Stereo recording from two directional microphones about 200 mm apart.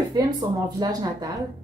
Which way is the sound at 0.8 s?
20° right (ahead or behind).